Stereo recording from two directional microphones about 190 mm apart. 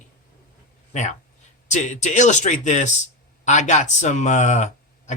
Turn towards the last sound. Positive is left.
turn(degrees=40)  # may be behind; listen again after turning